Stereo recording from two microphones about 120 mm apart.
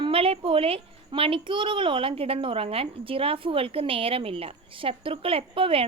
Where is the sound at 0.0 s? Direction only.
50° right (ahead or behind).